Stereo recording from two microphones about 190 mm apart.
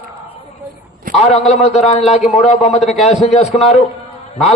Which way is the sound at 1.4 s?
35° left (ahead or behind).